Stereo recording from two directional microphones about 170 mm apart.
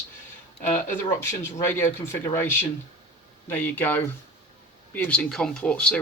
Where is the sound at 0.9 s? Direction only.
15° left (ahead or behind).